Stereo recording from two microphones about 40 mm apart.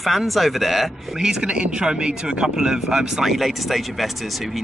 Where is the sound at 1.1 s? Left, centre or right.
Centre.